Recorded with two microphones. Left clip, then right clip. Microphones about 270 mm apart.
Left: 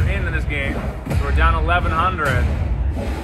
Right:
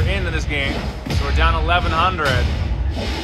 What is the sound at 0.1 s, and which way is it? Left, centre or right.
Music, centre.